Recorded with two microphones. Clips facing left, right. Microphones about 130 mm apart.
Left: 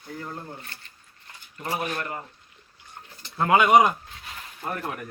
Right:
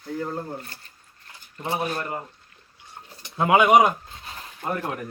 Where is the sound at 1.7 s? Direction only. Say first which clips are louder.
Right 2 dB; 30° right (ahead or behind).